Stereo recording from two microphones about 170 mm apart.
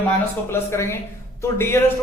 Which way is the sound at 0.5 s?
15° left (ahead or behind).